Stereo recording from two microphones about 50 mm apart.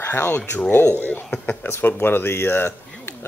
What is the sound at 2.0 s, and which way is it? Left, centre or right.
Speech, left.